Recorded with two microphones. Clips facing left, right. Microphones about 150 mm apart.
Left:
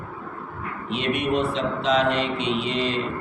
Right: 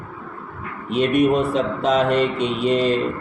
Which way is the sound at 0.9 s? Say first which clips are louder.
Right 7 dB; 45° right (ahead or behind).